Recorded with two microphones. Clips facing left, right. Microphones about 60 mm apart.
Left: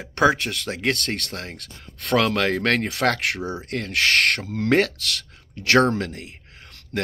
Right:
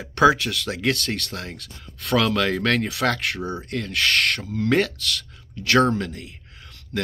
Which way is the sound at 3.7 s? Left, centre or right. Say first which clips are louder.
Left 2 dB; left.